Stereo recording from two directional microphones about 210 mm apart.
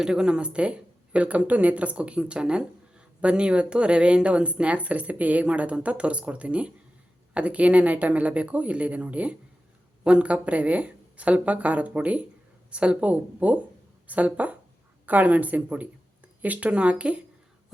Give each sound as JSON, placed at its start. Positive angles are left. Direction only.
{"t": 0.0, "sound": "speech", "side_deg": -5}